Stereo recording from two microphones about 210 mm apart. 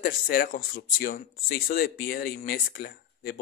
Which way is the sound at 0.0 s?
45° left (ahead or behind).